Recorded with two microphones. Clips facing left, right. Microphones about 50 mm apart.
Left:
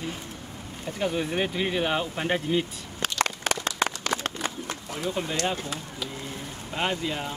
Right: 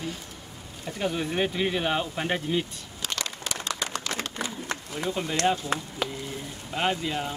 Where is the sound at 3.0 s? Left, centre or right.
Left.